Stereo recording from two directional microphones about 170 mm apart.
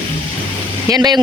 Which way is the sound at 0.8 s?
25° right (ahead or behind).